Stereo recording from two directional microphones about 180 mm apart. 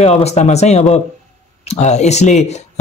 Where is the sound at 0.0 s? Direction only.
35° left (ahead or behind).